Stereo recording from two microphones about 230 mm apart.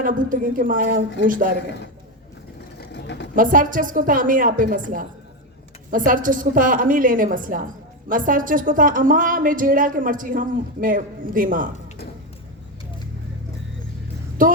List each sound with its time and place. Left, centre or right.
0.0 s a woman's voice: right
2.9 s a sound: left
3.3 s a woman's voice: right
14.4 s a woman's voice: right